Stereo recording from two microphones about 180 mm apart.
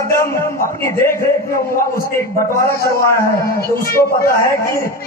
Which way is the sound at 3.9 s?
55° left (ahead or behind).